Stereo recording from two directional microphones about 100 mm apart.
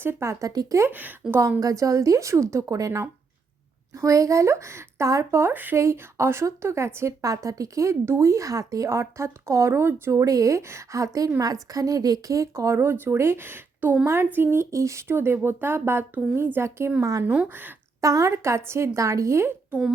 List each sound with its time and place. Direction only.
0.0 s a woman's voice: 25° right (ahead or behind)
0.9 s speech: 15° right (ahead or behind)
1.3 s a woman's voice: 30° right (ahead or behind)
17.0 s a woman's voice: 35° right (ahead or behind)
17.3 s speech: 15° right (ahead or behind)
18.0 s speech: 35° right (ahead or behind)